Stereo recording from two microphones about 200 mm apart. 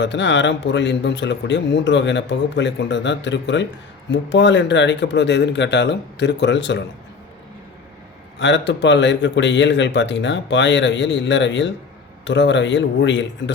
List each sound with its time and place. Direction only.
0.0 s a man's voice: 60° left (ahead or behind)
8.4 s a man's voice: 65° left (ahead or behind)